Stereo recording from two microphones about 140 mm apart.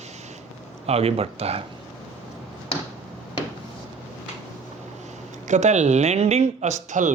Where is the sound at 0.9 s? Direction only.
45° right (ahead or behind).